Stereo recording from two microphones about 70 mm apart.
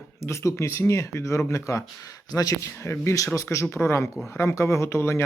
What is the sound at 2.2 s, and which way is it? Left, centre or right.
Speech, left.